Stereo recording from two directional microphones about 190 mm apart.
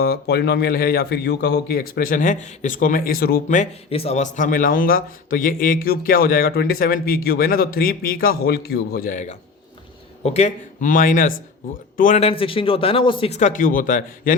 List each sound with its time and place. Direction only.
0.0 s a man's voice: 55° left (ahead or behind)